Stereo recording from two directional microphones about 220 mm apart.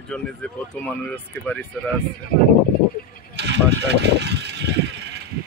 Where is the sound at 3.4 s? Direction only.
50° right (ahead or behind).